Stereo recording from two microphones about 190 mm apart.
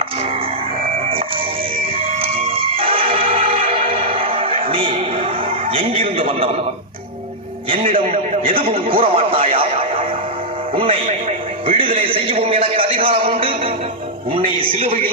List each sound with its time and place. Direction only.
1.8 s music: 30° right (ahead or behind)
5.7 s a man's voice: 30° right (ahead or behind)
7.9 s a sound: 30° right (ahead or behind)
8.7 s radio: 30° right (ahead or behind)
10.8 s a man's voice: 30° right (ahead or behind)